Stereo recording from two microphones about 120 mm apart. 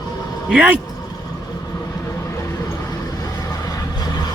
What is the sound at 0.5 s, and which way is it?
Speech, 10° right (ahead or behind).